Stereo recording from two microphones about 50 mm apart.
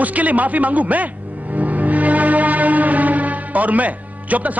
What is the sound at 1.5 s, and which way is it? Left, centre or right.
Music, right.